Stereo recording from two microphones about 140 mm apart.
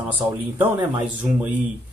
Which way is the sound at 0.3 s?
15° right (ahead or behind).